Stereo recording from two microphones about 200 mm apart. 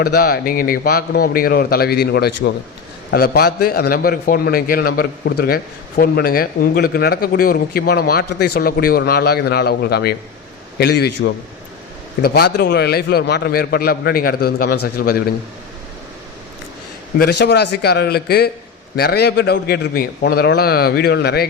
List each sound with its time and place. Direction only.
0.0 s a man's voice: 50° left (ahead or behind)
12.2 s a man's voice: 55° left (ahead or behind)
17.2 s a man's voice: 55° left (ahead or behind)